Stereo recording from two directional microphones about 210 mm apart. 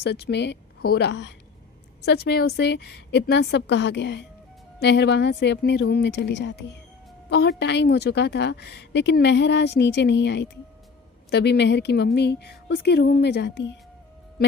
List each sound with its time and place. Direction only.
0.0 s a woman's voice: 50° left (ahead or behind)